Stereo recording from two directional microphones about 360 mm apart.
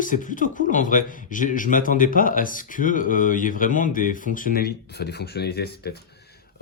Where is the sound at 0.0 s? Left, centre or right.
Left.